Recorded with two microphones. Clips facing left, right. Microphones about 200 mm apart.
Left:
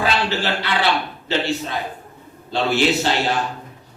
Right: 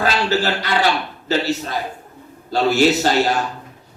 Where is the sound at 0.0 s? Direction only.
40° right (ahead or behind).